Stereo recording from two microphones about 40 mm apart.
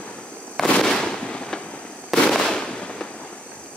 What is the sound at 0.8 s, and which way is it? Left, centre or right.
Fireworks, centre.